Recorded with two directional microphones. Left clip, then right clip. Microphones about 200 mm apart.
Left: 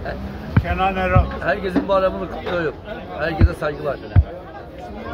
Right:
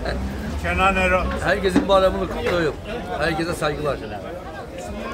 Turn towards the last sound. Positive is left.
turn(degrees=-10)  # may be behind; listen again after turning